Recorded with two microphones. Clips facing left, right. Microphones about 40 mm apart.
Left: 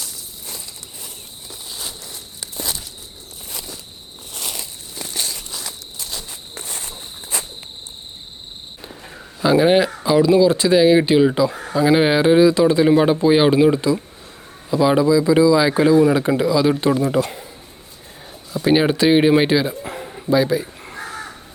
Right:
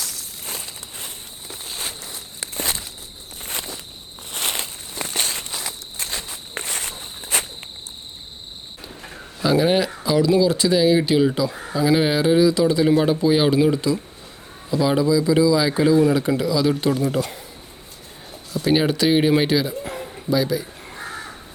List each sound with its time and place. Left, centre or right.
0.4 s a sound: right
4.3 s walk: right
6.7 s walk: right
7.3 s cricket: right
9.4 s a man's voice: centre
18.7 s a man's voice: centre
20.0 s bow-wow: centre
20.3 s speech: left